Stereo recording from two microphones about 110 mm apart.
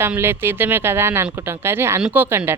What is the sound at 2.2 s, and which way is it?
Speech, 25° right (ahead or behind).